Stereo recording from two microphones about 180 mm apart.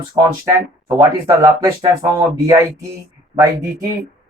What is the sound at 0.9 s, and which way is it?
Speech, 15° right (ahead or behind).